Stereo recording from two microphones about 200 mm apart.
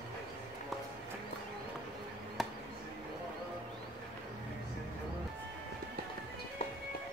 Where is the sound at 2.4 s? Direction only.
Centre (ahead or behind).